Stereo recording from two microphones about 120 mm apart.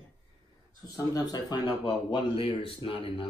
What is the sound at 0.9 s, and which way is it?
Speech, 30° left (ahead or behind).